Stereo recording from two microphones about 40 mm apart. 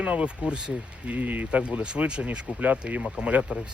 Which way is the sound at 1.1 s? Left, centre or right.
Right.